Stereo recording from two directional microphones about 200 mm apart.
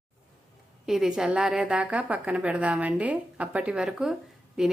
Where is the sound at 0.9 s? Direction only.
Centre (ahead or behind).